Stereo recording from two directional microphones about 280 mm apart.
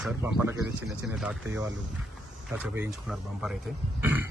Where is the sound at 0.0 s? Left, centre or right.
Centre.